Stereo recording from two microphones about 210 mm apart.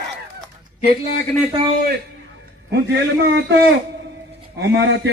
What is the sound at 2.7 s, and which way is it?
Speech, 55° right (ahead or behind).